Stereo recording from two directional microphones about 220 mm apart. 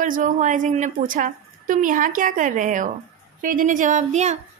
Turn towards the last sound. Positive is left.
turn(degrees=-30)  # may be behind; listen again after turning